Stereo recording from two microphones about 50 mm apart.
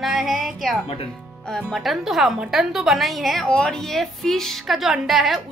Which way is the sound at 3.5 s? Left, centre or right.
Centre.